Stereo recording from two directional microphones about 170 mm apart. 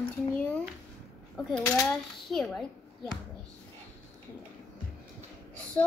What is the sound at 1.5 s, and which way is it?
Speech, 5° left (ahead or behind).